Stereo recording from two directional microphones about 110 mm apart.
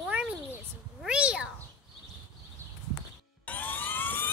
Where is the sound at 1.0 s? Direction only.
10° right (ahead or behind).